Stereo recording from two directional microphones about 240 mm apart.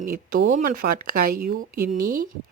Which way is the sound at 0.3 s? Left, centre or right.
Right.